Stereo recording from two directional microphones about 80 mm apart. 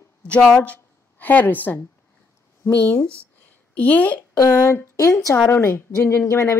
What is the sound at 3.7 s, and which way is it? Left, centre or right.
Speech, centre.